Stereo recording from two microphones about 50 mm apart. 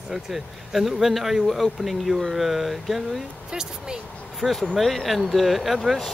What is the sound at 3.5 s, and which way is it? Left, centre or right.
Speech, centre.